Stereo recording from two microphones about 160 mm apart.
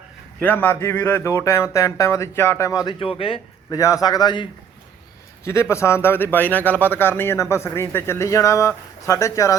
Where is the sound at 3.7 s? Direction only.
20° left (ahead or behind).